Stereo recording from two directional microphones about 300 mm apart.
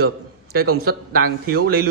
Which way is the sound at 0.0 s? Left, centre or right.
Right.